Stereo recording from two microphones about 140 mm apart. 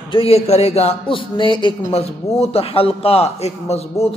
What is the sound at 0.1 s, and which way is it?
A man's voice, 45° left (ahead or behind).